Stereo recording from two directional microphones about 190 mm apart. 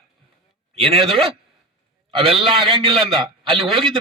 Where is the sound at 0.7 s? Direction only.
30° right (ahead or behind).